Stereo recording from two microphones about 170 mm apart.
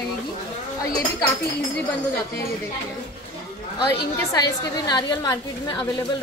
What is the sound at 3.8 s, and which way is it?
A woman's voice, 25° left (ahead or behind).